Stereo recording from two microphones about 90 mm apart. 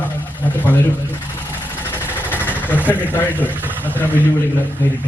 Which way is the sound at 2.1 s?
20° left (ahead or behind).